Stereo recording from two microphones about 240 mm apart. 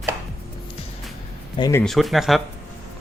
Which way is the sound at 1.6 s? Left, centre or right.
Centre.